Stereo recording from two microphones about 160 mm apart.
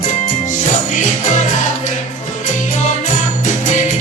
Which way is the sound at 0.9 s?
50° left (ahead or behind).